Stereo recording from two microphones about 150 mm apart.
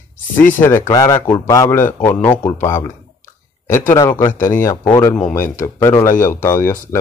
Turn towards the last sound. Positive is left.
turn(degrees=15)  # may be behind; listen again after turning